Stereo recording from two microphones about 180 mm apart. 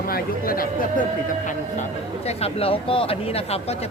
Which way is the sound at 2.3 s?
35° left (ahead or behind).